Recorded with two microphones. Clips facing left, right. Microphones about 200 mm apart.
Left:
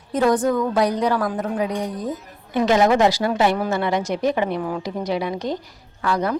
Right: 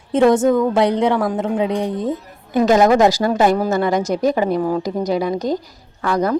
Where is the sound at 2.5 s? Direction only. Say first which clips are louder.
Right 4 dB; 45° right (ahead or behind).